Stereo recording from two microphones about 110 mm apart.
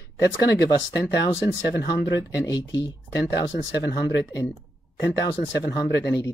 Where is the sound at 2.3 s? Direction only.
30° left (ahead or behind).